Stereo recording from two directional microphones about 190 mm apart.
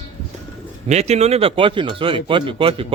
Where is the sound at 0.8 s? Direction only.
35° right (ahead or behind).